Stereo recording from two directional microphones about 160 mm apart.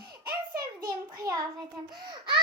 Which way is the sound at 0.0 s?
25° right (ahead or behind).